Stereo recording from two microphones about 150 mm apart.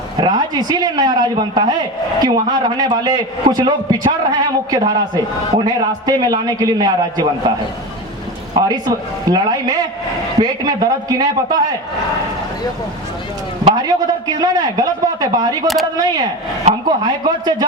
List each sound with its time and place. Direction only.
0.2 s a man's voice: 25° right (ahead or behind)
8.5 s a sound: 30° right (ahead or behind)
9.3 s a man's voice: 25° right (ahead or behind)
13.7 s a man's voice: 25° right (ahead or behind)
15.6 s speech: centre (ahead or behind)
16.0 s a man's voice: 25° right (ahead or behind)